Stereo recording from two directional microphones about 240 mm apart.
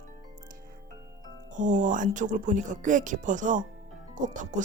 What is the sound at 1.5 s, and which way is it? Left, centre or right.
Speech, right.